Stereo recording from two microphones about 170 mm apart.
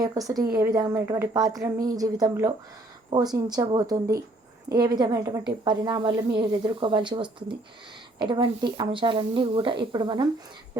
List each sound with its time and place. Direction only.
0.0 s a woman's voice: 20° right (ahead or behind)